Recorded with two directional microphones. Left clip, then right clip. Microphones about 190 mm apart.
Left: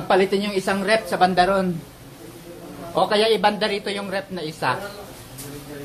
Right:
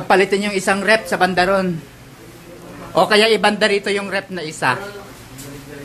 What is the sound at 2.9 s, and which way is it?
Speech, 20° right (ahead or behind).